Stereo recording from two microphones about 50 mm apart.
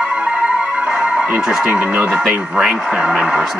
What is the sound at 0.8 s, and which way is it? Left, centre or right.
Music, right.